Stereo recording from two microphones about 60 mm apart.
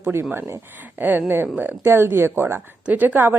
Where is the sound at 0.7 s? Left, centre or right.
Right.